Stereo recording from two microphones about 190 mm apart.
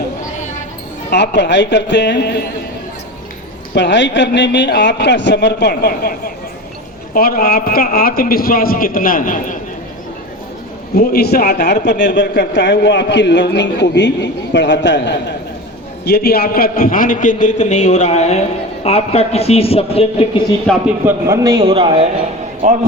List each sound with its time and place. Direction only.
1.1 s a man's voice: 65° left (ahead or behind)
3.8 s a man's voice: 70° left (ahead or behind); by 9.6 s 45° left (ahead or behind)
10.9 s a man's voice: 55° left (ahead or behind)
16.0 s a man's voice: 55° left (ahead or behind); by 20.2 s 30° left (ahead or behind)
20.7 s a man's voice: 10° right (ahead or behind)
21.6 s a man's voice: 25° right (ahead or behind)